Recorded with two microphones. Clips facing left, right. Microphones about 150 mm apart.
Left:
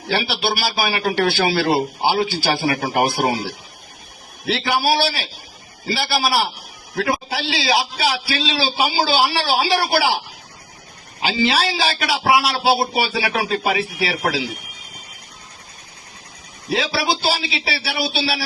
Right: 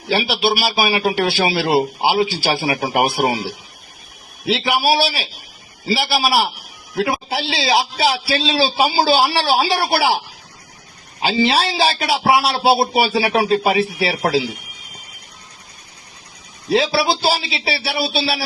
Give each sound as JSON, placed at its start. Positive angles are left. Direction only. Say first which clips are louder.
{"t": 0.1, "sound": "a man's voice", "louder": "right 3 dB", "side_deg": -10}
{"t": 7.0, "sound": "a man's voice", "louder": "right 2 dB", "side_deg": -20}
{"t": 11.2, "sound": "a man's voice", "louder": "right 2 dB", "side_deg": -30}
{"t": 16.6, "sound": "a man's voice", "louder": "right 4 dB", "side_deg": -30}